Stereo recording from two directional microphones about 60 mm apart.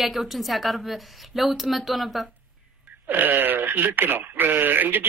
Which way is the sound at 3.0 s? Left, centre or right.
Right.